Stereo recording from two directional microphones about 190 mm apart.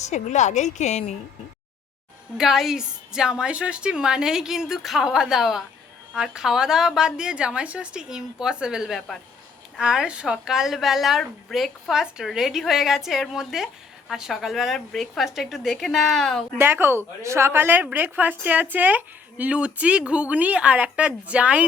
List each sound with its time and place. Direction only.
0.0 s a woman's voice: 35° left (ahead or behind)
2.4 s a woman's voice: centre (ahead or behind)
16.6 s speech: 10° right (ahead or behind)